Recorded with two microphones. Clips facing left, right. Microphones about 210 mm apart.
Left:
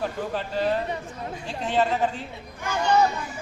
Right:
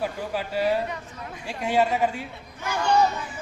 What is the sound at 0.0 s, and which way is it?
Speech, 10° right (ahead or behind).